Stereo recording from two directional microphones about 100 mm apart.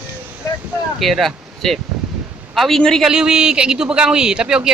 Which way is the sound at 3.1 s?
10° right (ahead or behind).